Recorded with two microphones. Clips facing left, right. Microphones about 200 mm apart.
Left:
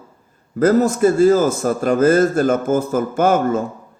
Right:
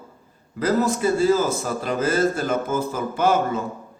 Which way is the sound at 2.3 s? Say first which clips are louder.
Left 7 dB; 45° left (ahead or behind).